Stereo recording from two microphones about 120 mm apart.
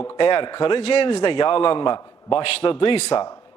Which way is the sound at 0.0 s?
45° left (ahead or behind).